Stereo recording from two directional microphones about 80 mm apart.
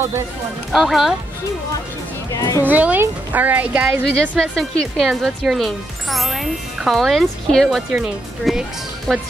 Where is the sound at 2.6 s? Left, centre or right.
Right.